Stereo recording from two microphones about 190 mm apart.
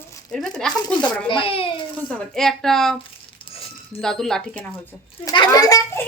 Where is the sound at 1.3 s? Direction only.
30° left (ahead or behind).